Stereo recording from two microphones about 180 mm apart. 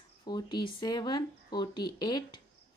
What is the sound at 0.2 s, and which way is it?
Speech, 25° left (ahead or behind).